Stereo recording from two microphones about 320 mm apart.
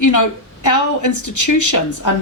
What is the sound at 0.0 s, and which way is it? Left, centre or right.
A woman's voice, left.